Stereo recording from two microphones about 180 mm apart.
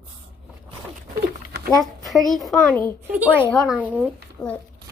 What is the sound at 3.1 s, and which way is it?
A woman's voice, 10° right (ahead or behind).